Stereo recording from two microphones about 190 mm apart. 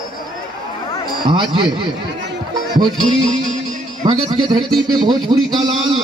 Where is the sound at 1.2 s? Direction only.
25° right (ahead or behind).